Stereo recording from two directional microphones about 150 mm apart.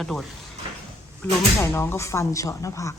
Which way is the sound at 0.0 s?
Centre (ahead or behind).